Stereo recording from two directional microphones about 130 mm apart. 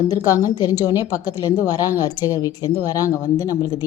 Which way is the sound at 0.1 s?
25° left (ahead or behind).